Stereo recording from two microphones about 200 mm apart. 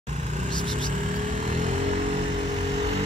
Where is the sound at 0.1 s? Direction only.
35° right (ahead or behind).